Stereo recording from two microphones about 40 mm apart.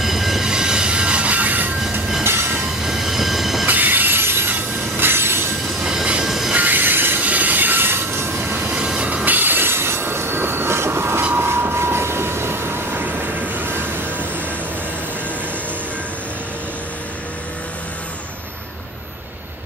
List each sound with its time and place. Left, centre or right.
0.0 s train: centre
0.5 s train: centre; by 1.7 s right
2.2 s train: right
2.8 s train: centre
3.6 s train wheels squealing: right
4.9 s train: right
6.2 s train: centre
6.5 s train: right
7.2 s train: right
8.8 s train: right
9.2 s train: right
13.0 s vehicle: right